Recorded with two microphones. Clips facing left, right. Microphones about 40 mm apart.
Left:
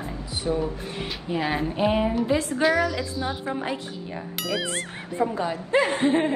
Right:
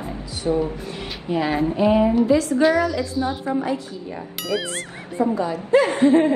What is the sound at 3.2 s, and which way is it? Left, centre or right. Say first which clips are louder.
Speech: right 6 dB; left.